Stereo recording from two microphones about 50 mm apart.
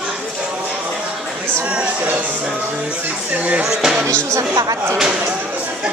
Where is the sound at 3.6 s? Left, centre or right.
Centre.